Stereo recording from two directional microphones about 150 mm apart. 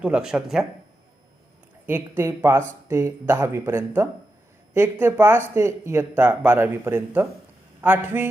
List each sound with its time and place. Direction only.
0.0 s speech: 5° right (ahead or behind)
1.9 s speech: 15° right (ahead or behind)